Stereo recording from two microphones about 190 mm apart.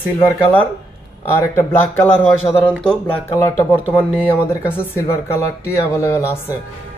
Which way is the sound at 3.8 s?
10° right (ahead or behind).